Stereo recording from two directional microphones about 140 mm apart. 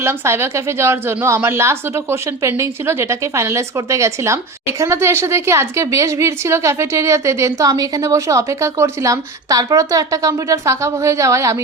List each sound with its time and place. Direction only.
0.0 s a woman's voice: 15° right (ahead or behind)